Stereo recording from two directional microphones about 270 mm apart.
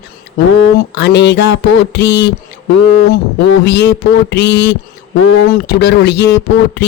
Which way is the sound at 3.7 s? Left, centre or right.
Left.